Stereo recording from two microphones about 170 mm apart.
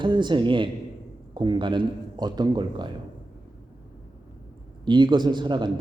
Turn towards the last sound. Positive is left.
turn(degrees=-25)  # may be behind; listen again after turning